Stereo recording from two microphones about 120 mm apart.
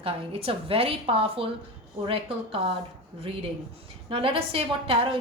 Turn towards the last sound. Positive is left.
turn(degrees=-50)  # may be behind; listen again after turning